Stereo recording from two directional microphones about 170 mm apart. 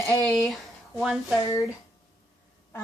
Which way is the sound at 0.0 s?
Centre (ahead or behind).